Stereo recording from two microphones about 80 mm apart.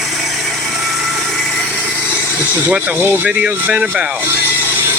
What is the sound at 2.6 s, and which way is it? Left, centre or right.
Speech, right.